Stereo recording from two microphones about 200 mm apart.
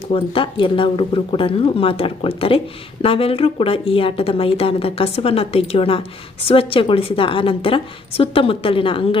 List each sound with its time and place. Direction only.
0.1 s a woman's voice: 25° left (ahead or behind)